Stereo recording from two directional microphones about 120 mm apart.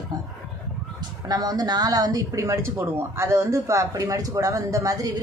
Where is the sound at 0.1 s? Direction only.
35° right (ahead or behind).